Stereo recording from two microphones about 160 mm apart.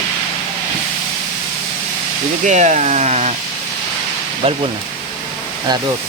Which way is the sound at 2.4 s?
45° right (ahead or behind).